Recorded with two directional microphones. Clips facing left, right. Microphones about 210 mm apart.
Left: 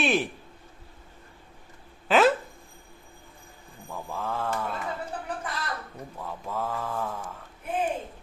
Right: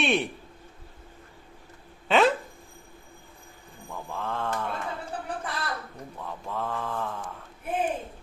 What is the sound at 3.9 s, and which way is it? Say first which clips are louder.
Mantra: left 1 dB; 5° left (ahead or behind).